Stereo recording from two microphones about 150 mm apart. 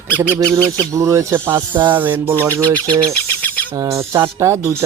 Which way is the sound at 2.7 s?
10° left (ahead or behind).